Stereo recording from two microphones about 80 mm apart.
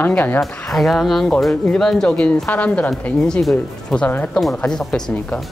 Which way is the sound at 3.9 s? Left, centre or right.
Centre.